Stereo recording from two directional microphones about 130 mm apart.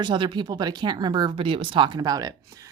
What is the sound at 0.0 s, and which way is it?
Speech, 35° right (ahead or behind).